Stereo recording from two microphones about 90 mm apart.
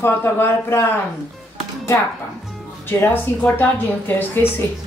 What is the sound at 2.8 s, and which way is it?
Speech, 25° left (ahead or behind).